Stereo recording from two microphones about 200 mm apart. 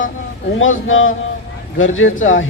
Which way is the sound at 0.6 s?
80° left.